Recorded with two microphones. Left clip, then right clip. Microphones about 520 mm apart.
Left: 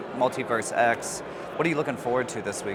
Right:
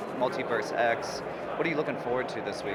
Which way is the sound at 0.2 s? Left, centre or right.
Left.